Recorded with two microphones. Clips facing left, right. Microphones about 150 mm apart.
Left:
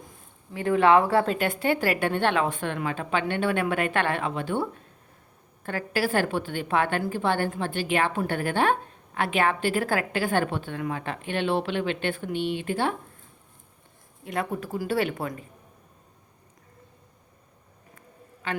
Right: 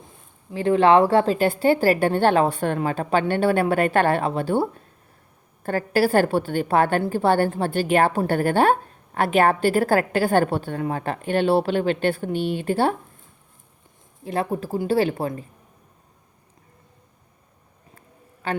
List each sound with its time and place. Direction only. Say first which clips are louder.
0.5 s a woman's voice: right 4 dB; 30° right (ahead or behind)
14.3 s a woman's voice: right 5 dB; 30° right (ahead or behind)
18.4 s a man's voice: right 5 dB; 35° right (ahead or behind)